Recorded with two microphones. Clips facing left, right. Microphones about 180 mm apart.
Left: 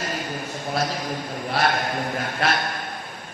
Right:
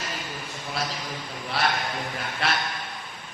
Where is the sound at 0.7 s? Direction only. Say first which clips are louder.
Left 6 dB; 45° left (ahead or behind).